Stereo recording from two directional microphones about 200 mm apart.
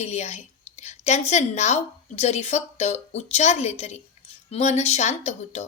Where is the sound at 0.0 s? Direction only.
35° left (ahead or behind).